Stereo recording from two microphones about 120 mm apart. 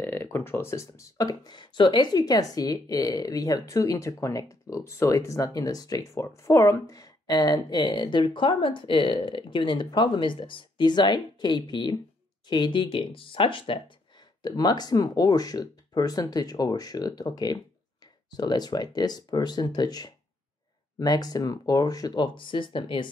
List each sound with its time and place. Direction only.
0.0 s speech: 20° left (ahead or behind); by 13.8 s 45° left (ahead or behind)
14.6 s speech: 35° left (ahead or behind)